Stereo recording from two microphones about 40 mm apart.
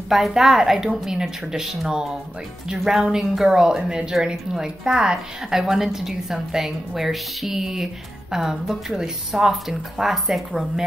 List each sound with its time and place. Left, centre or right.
0.3 s a woman's voice: centre
2.8 s a woman's voice: centre